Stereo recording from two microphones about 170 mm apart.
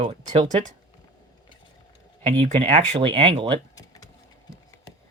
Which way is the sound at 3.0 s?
30° right (ahead or behind).